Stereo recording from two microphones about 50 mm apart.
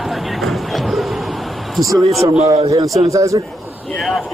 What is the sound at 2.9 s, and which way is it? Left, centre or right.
Speech, right.